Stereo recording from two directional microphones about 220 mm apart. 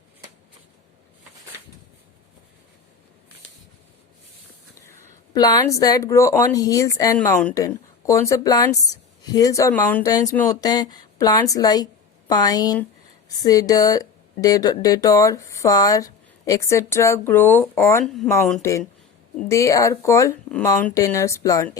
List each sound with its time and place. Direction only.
4.9 s speech: 15° left (ahead or behind)
19.5 s speech: 15° left (ahead or behind)